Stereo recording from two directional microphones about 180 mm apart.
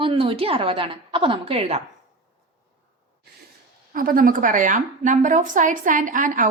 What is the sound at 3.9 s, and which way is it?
A woman's voice, 50° right (ahead or behind).